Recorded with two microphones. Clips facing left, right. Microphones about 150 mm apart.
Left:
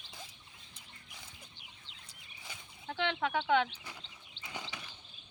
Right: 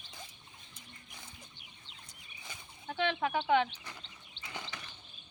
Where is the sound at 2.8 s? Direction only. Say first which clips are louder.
Right 2 dB; 5° right (ahead or behind).